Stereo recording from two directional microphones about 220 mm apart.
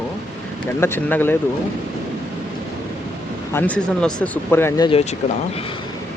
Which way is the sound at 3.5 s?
5° left (ahead or behind).